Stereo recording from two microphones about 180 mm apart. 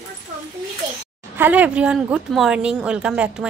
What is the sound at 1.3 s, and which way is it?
A woman's voice, 10° right (ahead or behind).